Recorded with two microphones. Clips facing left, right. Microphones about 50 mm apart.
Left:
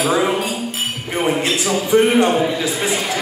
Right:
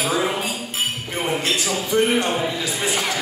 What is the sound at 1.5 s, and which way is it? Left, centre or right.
Speech, centre.